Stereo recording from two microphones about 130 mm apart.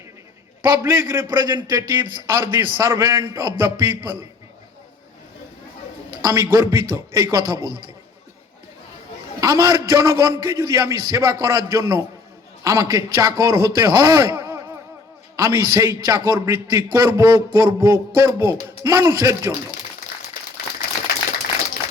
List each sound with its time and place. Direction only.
0.6 s a man's voice: 25° right (ahead or behind)
1.3 s a man's voice: 35° right (ahead or behind)
6.2 s a man's voice: 20° right (ahead or behind)
9.4 s a man's voice: 25° right (ahead or behind)